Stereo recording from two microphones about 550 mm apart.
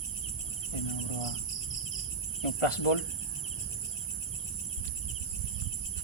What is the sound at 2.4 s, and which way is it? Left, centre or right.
Speech, left.